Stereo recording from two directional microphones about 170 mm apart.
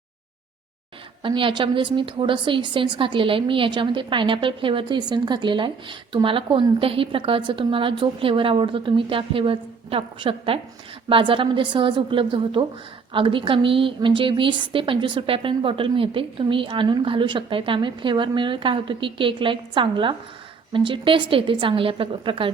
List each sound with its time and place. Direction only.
1.2 s a woman's voice: 30° right (ahead or behind)